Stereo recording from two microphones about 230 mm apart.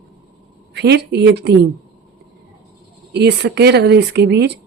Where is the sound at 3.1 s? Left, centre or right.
Right.